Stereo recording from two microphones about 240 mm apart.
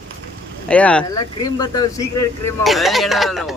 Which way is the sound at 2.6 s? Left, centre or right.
Centre.